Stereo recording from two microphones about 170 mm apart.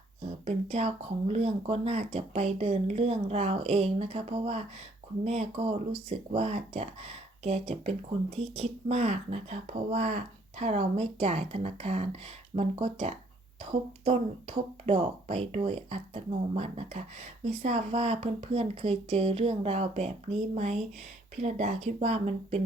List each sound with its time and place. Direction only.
0.4 s speech: 35° right (ahead or behind)